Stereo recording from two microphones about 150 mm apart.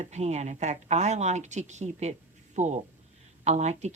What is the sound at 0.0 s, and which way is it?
Speech, 50° right (ahead or behind).